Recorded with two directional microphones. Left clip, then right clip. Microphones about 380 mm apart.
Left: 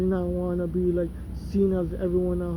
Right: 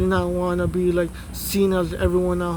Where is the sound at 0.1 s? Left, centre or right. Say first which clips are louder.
Right 6 dB; centre.